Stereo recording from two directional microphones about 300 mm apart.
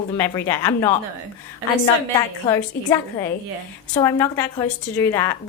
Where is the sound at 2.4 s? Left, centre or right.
Centre.